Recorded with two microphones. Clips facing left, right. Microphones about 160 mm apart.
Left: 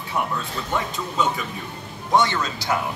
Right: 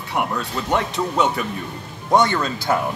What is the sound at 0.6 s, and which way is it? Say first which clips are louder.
Speech: right 7 dB; 75° right (ahead or behind).